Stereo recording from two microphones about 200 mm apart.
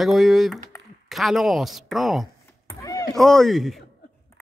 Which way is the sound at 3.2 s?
Centre (ahead or behind).